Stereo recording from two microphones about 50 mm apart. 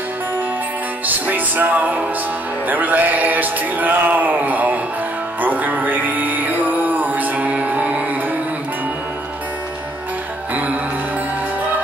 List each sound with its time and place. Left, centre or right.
1.0 s speech: right
5.4 s music: right
10.5 s music: right